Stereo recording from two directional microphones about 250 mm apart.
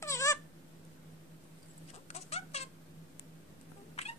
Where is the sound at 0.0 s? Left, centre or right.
Centre.